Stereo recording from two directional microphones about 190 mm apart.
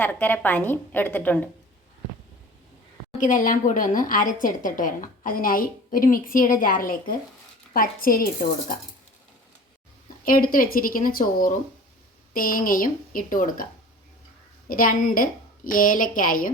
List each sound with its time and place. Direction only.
0.0 s a woman's voice: 10° left (ahead or behind)
3.2 s speech: 45° left (ahead or behind)
10.2 s speech: 50° left (ahead or behind)
14.7 s speech: 45° left (ahead or behind)